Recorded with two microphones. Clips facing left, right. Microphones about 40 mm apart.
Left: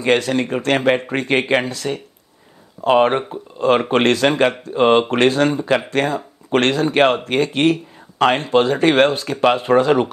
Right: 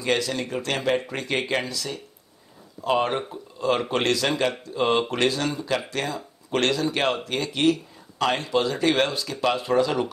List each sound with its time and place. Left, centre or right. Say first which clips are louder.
0.0 s speech: left 8 dB; left